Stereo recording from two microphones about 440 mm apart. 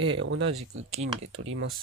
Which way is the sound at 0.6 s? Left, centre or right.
Centre.